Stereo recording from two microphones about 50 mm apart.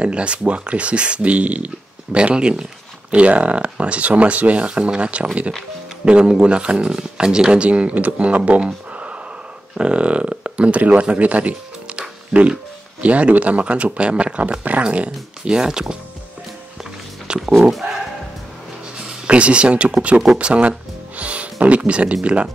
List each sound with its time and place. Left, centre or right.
0.0 s speech: right
11.9 s music: right
13.0 s speech: right
15.4 s speech: centre
17.4 s dog: centre
19.2 s speech: right